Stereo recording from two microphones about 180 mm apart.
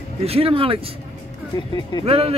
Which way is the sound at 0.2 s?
35° right (ahead or behind).